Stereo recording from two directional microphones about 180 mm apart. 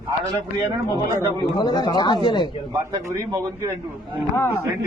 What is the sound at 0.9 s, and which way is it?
Speech, 15° right (ahead or behind).